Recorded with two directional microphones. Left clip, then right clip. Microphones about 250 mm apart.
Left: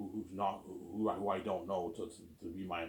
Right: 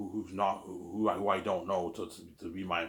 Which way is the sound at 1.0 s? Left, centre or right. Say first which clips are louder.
Right 6 dB; right.